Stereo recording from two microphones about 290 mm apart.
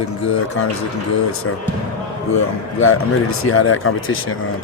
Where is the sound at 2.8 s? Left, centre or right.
Left.